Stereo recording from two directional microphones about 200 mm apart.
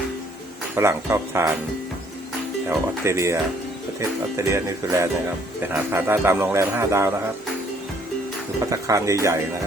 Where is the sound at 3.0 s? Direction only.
15° right (ahead or behind).